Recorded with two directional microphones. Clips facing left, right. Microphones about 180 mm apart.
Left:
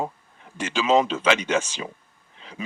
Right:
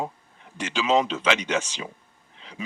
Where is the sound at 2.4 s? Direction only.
45° left (ahead or behind).